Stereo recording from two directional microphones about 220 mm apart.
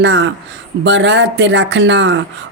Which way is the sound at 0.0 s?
55° right (ahead or behind).